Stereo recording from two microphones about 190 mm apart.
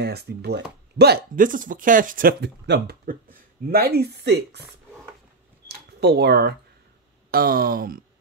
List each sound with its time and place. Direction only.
0.0 s speech: 60° right (ahead or behind)
2.4 s speech: 65° right (ahead or behind)
5.9 s speech: 60° right (ahead or behind)